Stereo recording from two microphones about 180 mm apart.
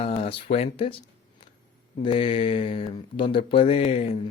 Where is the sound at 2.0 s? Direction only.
30° left (ahead or behind).